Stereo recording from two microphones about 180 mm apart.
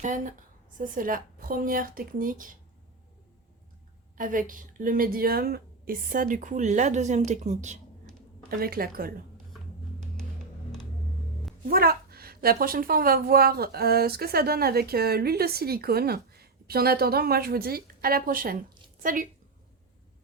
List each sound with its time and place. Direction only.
0.0 s a woman's voice: 45° right (ahead or behind)
4.2 s a woman's voice: 50° right (ahead or behind)
8.4 s a woman's voice: 55° right (ahead or behind)
11.6 s a woman's voice: 55° right (ahead or behind)